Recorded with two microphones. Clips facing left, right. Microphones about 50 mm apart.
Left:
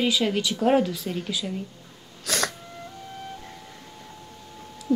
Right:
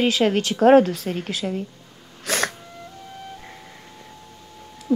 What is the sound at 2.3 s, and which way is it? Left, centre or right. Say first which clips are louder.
Insect: right 3 dB; right.